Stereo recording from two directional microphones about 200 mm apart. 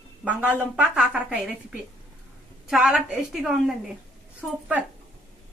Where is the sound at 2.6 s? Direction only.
5° right (ahead or behind).